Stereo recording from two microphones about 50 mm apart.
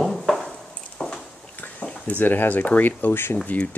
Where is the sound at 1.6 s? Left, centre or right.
Left.